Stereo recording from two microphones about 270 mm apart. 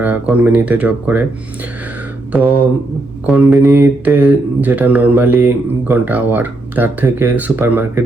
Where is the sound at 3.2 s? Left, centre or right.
Centre.